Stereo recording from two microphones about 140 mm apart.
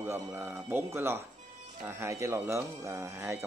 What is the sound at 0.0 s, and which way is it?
Speech, 15° right (ahead or behind).